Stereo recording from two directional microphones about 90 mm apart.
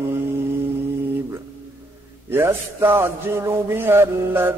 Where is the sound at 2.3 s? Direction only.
25° right (ahead or behind).